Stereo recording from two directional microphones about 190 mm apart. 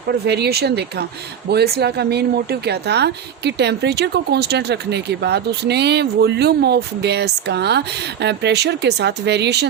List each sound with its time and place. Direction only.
0.1 s a woman's voice: 60° right (ahead or behind)